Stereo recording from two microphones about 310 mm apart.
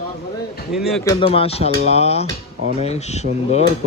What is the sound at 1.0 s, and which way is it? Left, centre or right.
Speech, centre.